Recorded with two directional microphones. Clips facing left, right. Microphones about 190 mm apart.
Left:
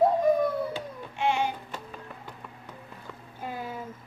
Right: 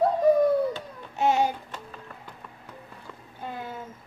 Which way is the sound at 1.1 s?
40° right (ahead or behind).